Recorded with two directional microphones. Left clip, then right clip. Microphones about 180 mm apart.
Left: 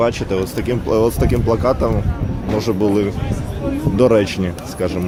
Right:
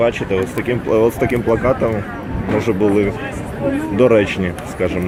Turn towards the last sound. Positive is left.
turn(degrees=10)  # may be behind; listen again after turning